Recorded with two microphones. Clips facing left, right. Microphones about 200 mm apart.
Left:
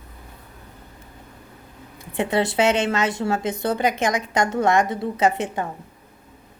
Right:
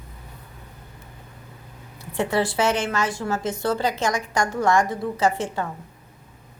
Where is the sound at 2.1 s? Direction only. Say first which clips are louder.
Left 2 dB; 20° left (ahead or behind).